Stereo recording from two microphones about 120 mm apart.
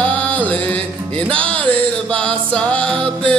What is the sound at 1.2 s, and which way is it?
Music, 10° left (ahead or behind).